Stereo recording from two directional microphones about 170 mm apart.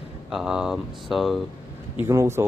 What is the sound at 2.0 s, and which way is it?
Speech, 15° right (ahead or behind).